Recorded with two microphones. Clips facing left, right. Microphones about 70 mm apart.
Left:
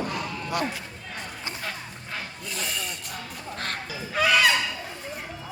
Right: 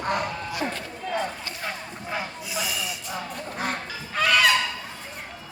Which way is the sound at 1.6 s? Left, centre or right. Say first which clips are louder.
Right 2 dB; centre.